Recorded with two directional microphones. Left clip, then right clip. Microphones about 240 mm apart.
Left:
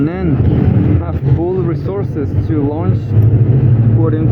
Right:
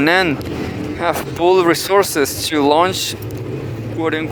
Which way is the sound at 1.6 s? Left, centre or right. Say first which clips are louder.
Right 6 dB; right.